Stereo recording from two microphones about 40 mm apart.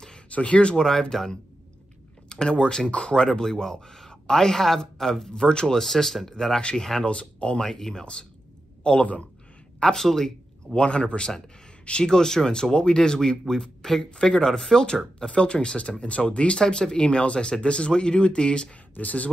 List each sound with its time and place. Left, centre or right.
0.3 s speech: left
1.1 s a man's voice: centre
5.3 s speech: left
5.8 s speech: centre
7.1 s speech: left
7.6 s speech: centre
8.0 s a man's voice: left
9.8 s speech: centre
10.7 s speech: left
15.1 s speech: left
18.9 s a man's voice: left